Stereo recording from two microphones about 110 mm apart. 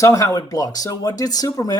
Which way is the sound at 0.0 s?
30° left (ahead or behind).